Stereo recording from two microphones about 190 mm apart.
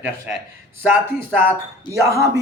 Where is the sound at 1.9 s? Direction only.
15° right (ahead or behind).